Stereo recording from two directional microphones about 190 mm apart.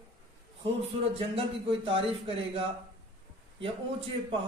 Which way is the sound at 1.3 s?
30° right (ahead or behind).